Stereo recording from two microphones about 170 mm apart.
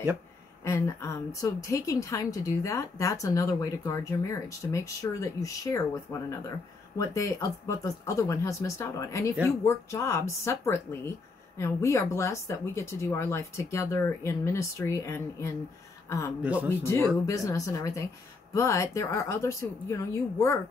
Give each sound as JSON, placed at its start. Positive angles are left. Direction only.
{"t": 0.7, "sound": "a woman's voice", "side_deg": 15}
{"t": 7.0, "sound": "speech", "side_deg": 15}
{"t": 16.6, "sound": "a woman's voice", "side_deg": 15}